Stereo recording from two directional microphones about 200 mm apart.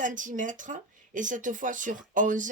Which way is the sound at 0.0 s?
40° right (ahead or behind).